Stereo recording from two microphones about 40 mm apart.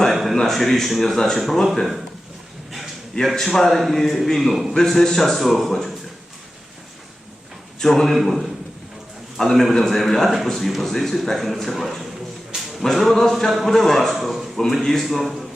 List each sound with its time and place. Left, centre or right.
0.1 s a sound: centre
0.3 s a man's voice: centre
3.1 s a man's voice: centre
3.8 s a man's voice: centre
4.7 s a man's voice: centre
7.8 s a man's voice: centre
8.1 s a man's voice: centre
15.0 s a man's voice: centre